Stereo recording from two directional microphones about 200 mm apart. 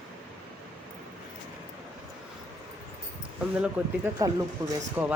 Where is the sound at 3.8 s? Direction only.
5° right (ahead or behind).